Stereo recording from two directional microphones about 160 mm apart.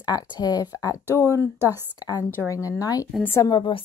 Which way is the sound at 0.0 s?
25° left (ahead or behind).